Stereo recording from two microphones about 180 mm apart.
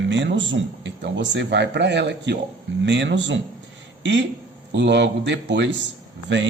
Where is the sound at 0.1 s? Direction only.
90° right.